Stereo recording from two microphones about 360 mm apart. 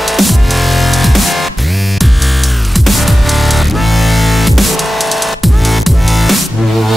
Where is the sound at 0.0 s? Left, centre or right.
Centre.